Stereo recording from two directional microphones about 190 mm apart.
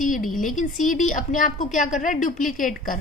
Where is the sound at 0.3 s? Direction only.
45° left (ahead or behind).